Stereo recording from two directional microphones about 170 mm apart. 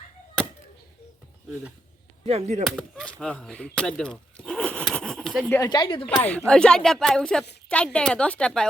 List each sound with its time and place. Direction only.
2.2 s speech: 40° right (ahead or behind)
2.6 s speech: 5° left (ahead or behind)
5.5 s speech: 25° left (ahead or behind)
6.1 s speech: 5° left (ahead or behind)